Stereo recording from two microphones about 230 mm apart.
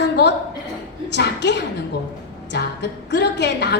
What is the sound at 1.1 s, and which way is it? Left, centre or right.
A woman's voice, left.